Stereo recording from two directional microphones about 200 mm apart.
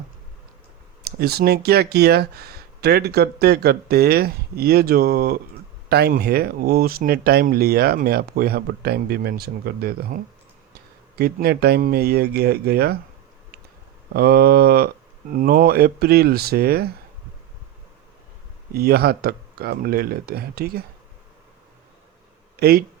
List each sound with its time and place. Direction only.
1.0 s speech: 50° right (ahead or behind)
11.2 s speech: 50° right (ahead or behind)
14.1 s speech: 50° right (ahead or behind)
18.7 s speech: 50° right (ahead or behind)